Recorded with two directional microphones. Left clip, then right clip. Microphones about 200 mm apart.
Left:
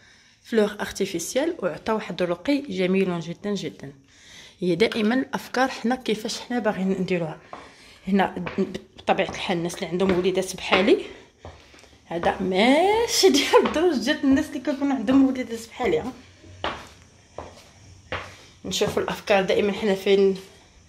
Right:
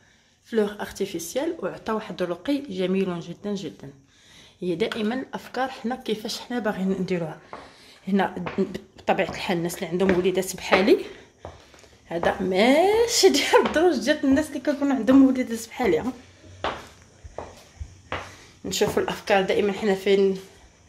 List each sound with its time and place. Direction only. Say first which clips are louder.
0.5 s speech: left 2 dB; 20° left (ahead or behind)
8.5 s a woman's voice: even; centre (ahead or behind)
18.8 s a woman's voice: right 1 dB; 5° right (ahead or behind)